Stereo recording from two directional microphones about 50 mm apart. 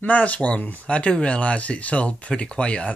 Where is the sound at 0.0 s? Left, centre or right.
Left.